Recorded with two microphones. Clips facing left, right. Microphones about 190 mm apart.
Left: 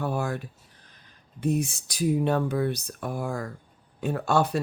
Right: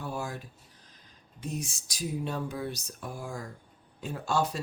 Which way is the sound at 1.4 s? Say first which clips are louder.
Left 11 dB; 60° left (ahead or behind).